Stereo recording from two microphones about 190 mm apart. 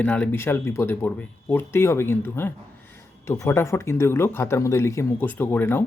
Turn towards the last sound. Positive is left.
turn(degrees=10)  # may be behind; listen again after turning